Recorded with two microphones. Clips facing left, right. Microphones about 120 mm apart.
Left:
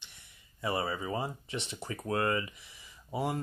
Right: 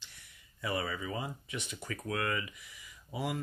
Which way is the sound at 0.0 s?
25° left (ahead or behind).